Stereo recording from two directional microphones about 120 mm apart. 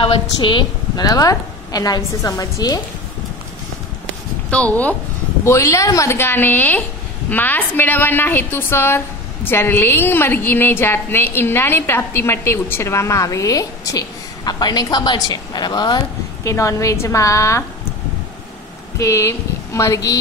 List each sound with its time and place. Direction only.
0.0 s a woman's voice: 45° left (ahead or behind)
4.5 s speech: 10° left (ahead or behind)
5.4 s a woman's voice: 25° left (ahead or behind)
18.9 s a woman's voice: 25° left (ahead or behind)